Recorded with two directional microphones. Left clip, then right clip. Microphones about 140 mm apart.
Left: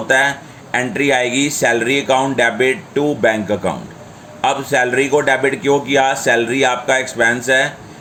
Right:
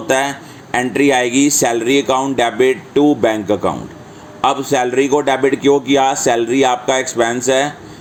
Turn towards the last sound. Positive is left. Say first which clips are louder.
# left 1 dB
turn(degrees=-30)  # may be behind; listen again after turning